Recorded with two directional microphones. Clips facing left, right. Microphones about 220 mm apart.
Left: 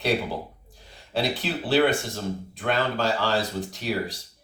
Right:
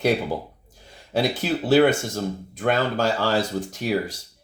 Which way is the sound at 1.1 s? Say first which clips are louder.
Right 4 dB; 45° right (ahead or behind).